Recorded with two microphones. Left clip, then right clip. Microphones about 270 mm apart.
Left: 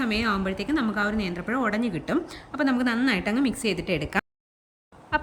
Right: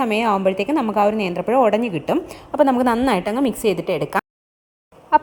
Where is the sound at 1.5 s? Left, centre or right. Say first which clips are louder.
Right 12 dB; right.